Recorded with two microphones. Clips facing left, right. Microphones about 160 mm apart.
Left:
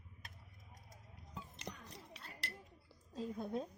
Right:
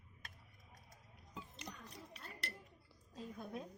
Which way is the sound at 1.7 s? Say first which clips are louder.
Left 6 dB; 90° left.